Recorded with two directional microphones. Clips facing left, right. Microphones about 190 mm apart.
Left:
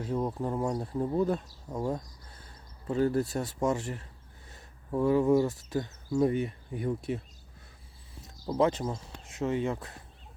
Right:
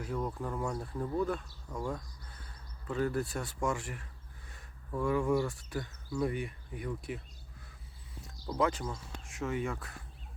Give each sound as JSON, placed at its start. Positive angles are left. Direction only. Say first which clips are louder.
{"t": 0.0, "sound": "speech", "louder": "left 5 dB", "side_deg": 25}
{"t": 2.3, "sound": "a sound", "louder": "left 1 dB", "side_deg": 25}
{"t": 2.9, "sound": "speech", "louder": "left 5 dB", "side_deg": 30}
{"t": 3.4, "sound": "speech", "louder": "left 5 dB", "side_deg": 25}
{"t": 3.8, "sound": "speech", "louder": "left 6 dB", "side_deg": 35}
{"t": 4.4, "sound": "speech", "louder": "left 6 dB", "side_deg": 25}
{"t": 8.4, "sound": "speech", "louder": "left 5 dB", "side_deg": 25}